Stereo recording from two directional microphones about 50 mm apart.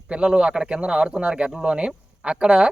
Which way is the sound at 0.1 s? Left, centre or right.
Centre.